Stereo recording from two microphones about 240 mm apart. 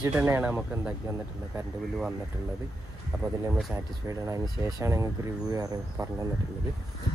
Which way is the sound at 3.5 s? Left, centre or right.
Centre.